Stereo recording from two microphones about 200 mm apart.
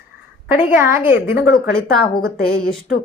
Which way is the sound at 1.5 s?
45° left (ahead or behind).